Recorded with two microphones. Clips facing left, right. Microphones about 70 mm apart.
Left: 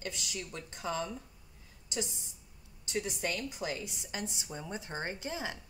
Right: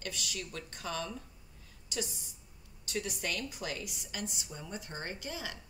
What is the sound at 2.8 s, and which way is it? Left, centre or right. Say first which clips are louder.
Speech: left 2 dB; left.